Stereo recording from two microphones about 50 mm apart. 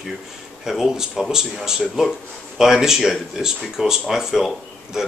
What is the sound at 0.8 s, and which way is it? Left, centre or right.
Speech, centre.